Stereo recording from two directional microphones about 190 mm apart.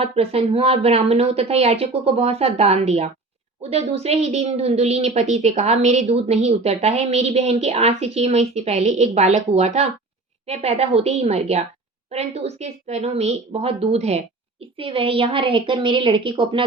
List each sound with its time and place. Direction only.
0.0 s a woman's voice: 30° right (ahead or behind)